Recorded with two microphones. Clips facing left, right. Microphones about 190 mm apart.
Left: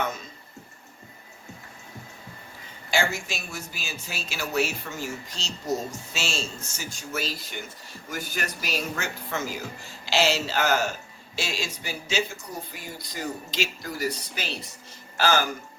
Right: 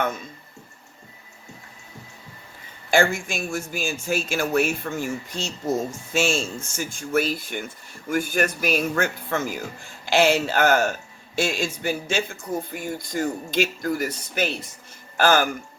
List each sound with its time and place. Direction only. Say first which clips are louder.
2.9 s speech: right 6 dB; 50° right (ahead or behind)